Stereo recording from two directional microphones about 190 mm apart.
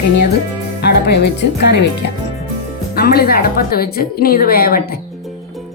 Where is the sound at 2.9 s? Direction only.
55° left (ahead or behind).